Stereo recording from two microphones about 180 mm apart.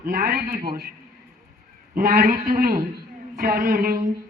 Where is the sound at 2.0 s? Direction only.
55° right (ahead or behind).